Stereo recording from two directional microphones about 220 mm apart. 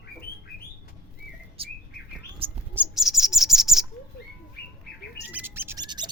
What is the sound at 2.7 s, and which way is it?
Bird, 5° right (ahead or behind).